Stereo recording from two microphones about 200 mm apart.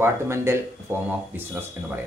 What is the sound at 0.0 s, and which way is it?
Speech, 15° right (ahead or behind).